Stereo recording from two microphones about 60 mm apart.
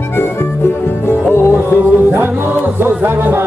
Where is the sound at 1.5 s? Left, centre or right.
Right.